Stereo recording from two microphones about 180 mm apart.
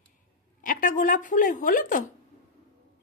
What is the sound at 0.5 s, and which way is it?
A woman's voice, 50° left (ahead or behind).